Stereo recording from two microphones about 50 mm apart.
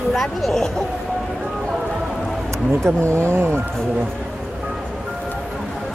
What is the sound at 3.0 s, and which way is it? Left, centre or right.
Speech, right.